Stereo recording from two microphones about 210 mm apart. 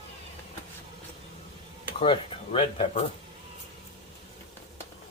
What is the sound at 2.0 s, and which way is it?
Speech, 25° left (ahead or behind).